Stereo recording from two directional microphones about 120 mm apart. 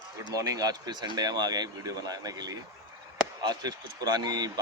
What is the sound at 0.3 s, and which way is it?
Speech, 30° right (ahead or behind).